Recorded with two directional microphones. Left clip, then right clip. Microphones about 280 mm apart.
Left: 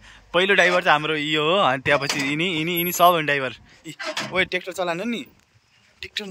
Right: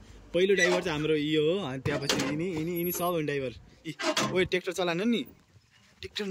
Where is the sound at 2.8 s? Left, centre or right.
Centre.